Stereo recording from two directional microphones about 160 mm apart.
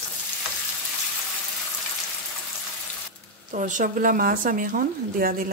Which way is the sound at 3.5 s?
50° right (ahead or behind).